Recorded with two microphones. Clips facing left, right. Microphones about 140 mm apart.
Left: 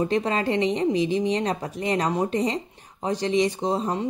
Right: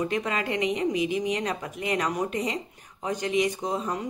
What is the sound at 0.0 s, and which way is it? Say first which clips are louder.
A woman's voice: left 5 dB; 30° left (ahead or behind).